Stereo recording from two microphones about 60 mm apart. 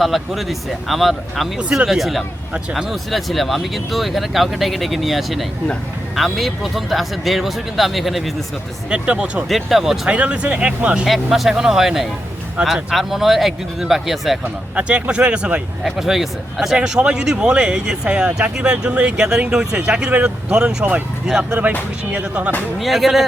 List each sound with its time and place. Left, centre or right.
0.0 s speech: centre
8.9 s speech: centre
9.5 s speech: centre
10.1 s speech: centre
11.0 s speech: centre
14.8 s speech: centre
15.8 s speech: centre
21.6 s speech: right
22.8 s speech: centre